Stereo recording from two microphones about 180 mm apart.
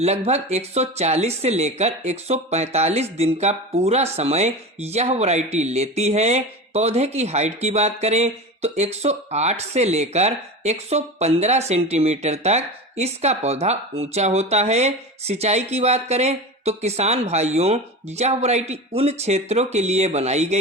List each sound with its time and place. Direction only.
0.0 s speech: 35° right (ahead or behind)